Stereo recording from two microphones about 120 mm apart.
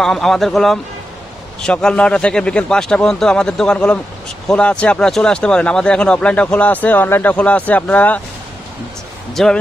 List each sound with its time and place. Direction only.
0.0 s speech: 5° left (ahead or behind)
9.3 s speech: centre (ahead or behind)